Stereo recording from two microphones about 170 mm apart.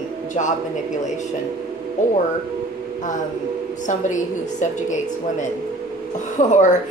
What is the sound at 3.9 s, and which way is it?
A woman's voice, 45° left (ahead or behind).